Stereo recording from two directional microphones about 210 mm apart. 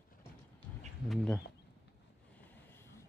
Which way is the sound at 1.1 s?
Centre (ahead or behind).